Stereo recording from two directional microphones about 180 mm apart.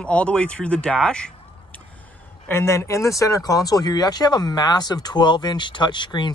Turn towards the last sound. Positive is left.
turn(degrees=25)  # may be behind; listen again after turning